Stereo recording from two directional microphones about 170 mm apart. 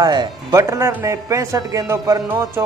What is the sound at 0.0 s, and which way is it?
Speech, 25° right (ahead or behind).